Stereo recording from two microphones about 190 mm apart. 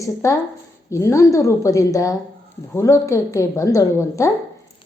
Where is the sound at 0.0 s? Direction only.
15° left (ahead or behind).